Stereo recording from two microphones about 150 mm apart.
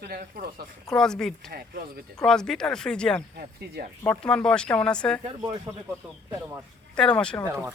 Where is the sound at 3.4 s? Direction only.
90° right.